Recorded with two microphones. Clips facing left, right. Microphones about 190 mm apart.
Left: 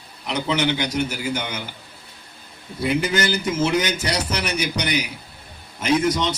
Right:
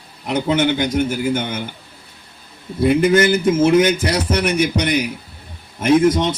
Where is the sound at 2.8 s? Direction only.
55° right (ahead or behind).